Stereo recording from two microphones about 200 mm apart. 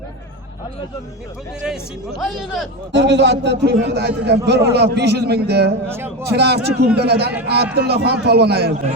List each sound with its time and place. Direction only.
1.6 s speech: centre (ahead or behind)
2.9 s a man's voice: 60° right (ahead or behind)
5.9 s speech: 10° right (ahead or behind)
6.3 s a man's voice: 55° right (ahead or behind)